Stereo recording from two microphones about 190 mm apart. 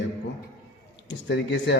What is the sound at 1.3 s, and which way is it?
Speech, 65° left (ahead or behind).